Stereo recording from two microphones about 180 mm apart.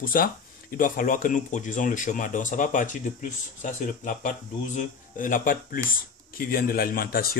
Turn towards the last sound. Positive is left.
turn(degrees=55)  # may be behind; listen again after turning